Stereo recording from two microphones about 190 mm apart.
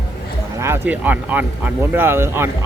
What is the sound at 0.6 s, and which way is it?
Speech, 10° right (ahead or behind).